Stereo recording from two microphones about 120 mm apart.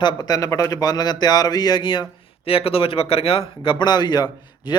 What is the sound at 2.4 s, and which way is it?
Speech, 50° left (ahead or behind).